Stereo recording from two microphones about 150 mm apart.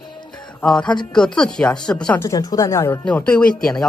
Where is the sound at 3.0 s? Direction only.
10° left (ahead or behind).